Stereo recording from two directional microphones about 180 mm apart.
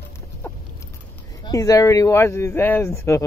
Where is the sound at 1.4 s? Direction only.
20° left (ahead or behind).